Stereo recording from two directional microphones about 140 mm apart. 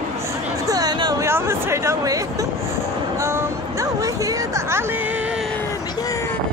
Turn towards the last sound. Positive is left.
turn(degrees=-20)  # may be behind; listen again after turning